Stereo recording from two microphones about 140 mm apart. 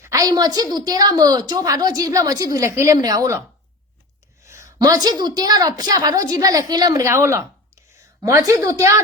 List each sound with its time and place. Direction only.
0.0 s a woman's voice: 25° right (ahead or behind)
4.4 s a woman's voice: 20° right (ahead or behind)